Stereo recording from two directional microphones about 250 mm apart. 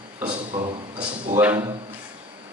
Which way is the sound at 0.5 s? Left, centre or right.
Centre.